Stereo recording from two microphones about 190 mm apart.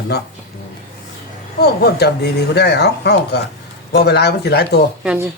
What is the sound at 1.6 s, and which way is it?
Speech, 60° left (ahead or behind).